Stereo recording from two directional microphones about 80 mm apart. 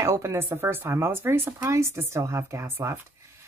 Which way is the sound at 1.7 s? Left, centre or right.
Right.